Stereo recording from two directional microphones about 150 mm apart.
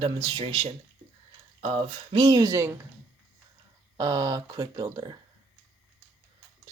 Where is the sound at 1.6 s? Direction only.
45° right (ahead or behind).